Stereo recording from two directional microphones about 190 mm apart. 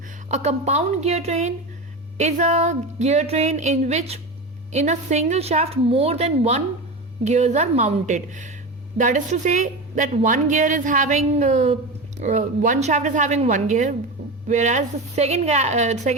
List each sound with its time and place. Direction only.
0.3 s a woman's voice: 35° right (ahead or behind)